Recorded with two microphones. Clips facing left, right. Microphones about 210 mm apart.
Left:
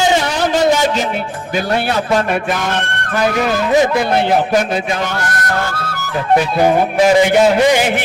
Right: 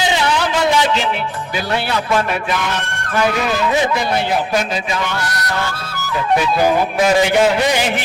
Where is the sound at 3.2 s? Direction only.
40° left (ahead or behind).